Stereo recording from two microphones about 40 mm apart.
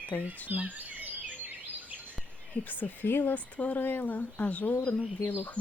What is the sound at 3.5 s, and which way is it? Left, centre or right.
Speech, left.